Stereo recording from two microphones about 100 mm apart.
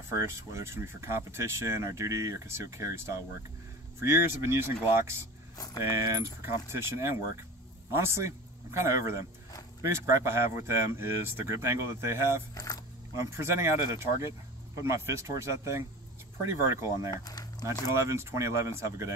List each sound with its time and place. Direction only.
0.1 s speech: 25° right (ahead or behind)
12.5 s speech: 40° left (ahead or behind)
13.1 s speech: 30° right (ahead or behind)
17.1 s speech: 40° left (ahead or behind)
17.9 s speech: 30° right (ahead or behind)